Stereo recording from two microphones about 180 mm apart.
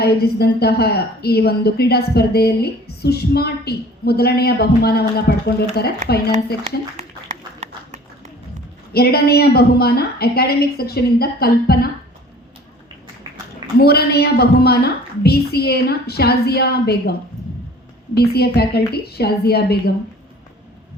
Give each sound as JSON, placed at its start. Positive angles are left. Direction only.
{"t": 0.0, "sound": "speech", "side_deg": 60}
{"t": 7.6, "sound": "a sound", "side_deg": -40}
{"t": 8.9, "sound": "speech", "side_deg": 60}
{"t": 13.7, "sound": "speech", "side_deg": 60}